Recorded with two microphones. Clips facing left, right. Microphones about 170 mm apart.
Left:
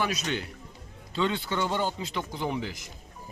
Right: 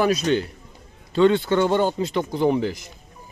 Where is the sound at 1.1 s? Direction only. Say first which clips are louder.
Right 11 dB; 55° right (ahead or behind).